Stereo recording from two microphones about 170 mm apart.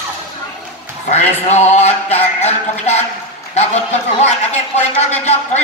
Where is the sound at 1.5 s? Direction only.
40° left (ahead or behind).